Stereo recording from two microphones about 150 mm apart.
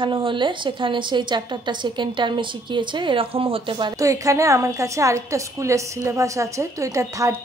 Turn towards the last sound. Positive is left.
turn(degrees=-20)  # may be behind; listen again after turning